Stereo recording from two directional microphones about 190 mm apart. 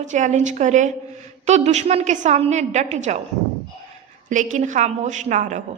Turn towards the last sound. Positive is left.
turn(degrees=-40)  # may be behind; listen again after turning